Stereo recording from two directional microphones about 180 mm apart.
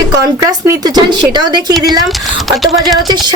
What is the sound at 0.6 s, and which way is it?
A woman's voice, 20° right (ahead or behind).